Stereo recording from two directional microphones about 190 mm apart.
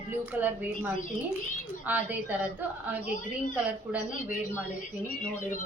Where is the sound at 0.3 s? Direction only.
10° right (ahead or behind).